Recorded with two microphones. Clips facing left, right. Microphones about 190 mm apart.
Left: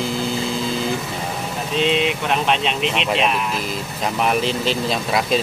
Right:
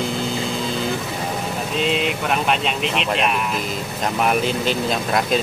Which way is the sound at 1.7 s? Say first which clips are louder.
Left 3 dB; centre (ahead or behind).